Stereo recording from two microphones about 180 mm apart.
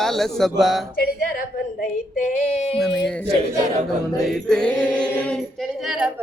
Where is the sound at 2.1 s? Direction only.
40° left (ahead or behind).